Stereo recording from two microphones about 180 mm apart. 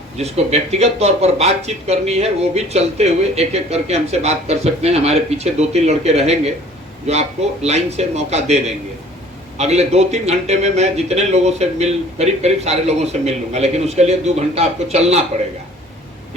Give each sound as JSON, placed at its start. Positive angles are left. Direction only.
{"t": 0.2, "sound": "speech", "side_deg": -35}